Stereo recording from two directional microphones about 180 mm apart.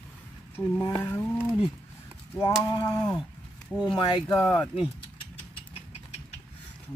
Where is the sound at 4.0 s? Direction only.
25° left (ahead or behind).